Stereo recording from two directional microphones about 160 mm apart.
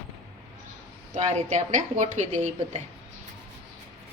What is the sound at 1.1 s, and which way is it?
A woman's voice, 45° right (ahead or behind).